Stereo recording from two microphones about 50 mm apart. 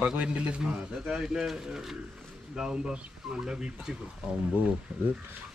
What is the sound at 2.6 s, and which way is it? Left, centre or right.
Speech, centre.